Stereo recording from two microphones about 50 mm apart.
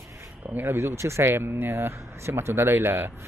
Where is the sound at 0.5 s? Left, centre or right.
Right.